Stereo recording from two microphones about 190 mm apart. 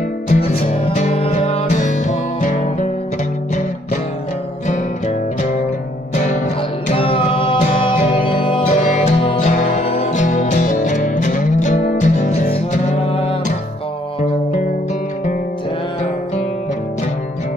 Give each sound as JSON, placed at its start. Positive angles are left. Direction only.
{"t": 0.3, "sound": "music", "side_deg": 30}
{"t": 6.9, "sound": "music", "side_deg": 30}
{"t": 8.6, "sound": "music", "side_deg": 40}